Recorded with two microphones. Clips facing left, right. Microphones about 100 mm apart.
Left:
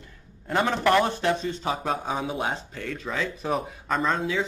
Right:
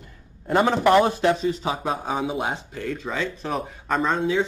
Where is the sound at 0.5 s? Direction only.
15° right (ahead or behind).